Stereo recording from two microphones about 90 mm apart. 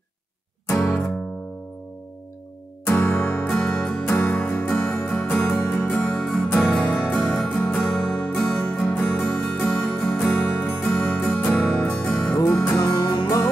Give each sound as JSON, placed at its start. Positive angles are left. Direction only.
{"t": 0.7, "sound": "music", "side_deg": 30}
{"t": 2.9, "sound": "music", "side_deg": 25}
{"t": 13.0, "sound": "music", "side_deg": 55}